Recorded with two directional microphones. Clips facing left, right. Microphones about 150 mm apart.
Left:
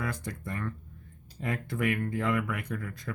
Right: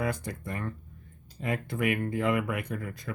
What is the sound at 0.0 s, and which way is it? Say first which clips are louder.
Speech: right 4 dB; 15° right (ahead or behind).